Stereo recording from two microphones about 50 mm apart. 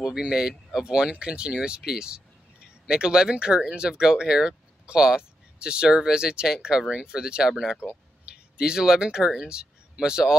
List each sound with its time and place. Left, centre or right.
0.0 s speech: centre